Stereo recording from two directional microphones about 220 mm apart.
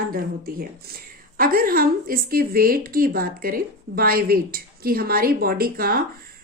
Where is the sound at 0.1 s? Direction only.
40° right (ahead or behind).